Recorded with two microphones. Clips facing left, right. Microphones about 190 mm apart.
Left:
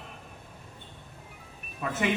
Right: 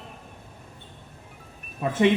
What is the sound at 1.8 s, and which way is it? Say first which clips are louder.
Speech: right 8 dB; 30° right (ahead or behind).